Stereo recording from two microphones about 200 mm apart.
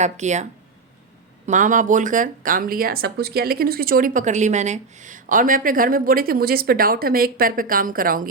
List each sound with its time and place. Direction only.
0.0 s speech: 35° right (ahead or behind)
1.5 s speech: 40° right (ahead or behind)